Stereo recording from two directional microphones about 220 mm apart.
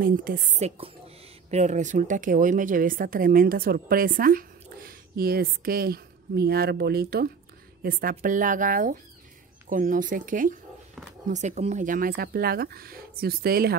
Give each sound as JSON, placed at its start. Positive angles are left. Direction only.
{"t": 0.0, "sound": "a woman's voice", "side_deg": -40}